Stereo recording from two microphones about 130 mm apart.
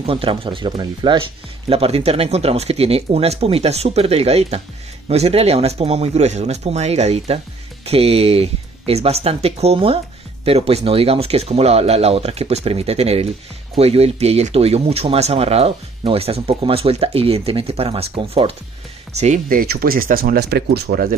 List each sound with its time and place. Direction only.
0.0 s speech: 45° right (ahead or behind)
1.7 s speech: 50° right (ahead or behind)
19.1 s speech: 65° right (ahead or behind); by 20.3 s 90° right